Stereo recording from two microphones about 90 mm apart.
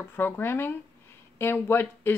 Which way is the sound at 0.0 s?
25° left (ahead or behind).